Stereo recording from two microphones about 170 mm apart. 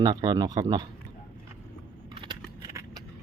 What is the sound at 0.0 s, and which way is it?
Speech, 25° right (ahead or behind).